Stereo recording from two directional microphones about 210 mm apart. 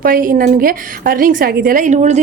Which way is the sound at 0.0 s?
40° right (ahead or behind).